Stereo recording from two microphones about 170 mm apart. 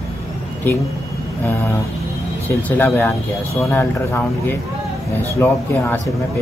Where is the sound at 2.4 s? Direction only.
10° left (ahead or behind).